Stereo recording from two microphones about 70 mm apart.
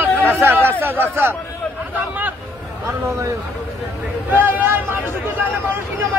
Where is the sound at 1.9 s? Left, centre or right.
Right.